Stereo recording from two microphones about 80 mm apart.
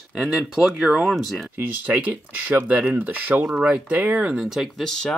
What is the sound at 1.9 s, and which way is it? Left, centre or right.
Speech, centre.